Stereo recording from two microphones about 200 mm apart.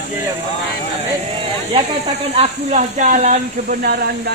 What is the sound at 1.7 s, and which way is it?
Speech, 30° right (ahead or behind).